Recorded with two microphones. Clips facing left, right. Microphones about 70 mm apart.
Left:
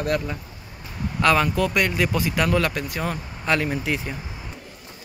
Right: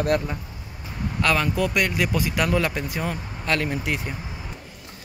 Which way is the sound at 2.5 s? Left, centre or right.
Centre.